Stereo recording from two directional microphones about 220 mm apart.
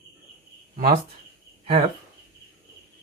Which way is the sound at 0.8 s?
40° right (ahead or behind).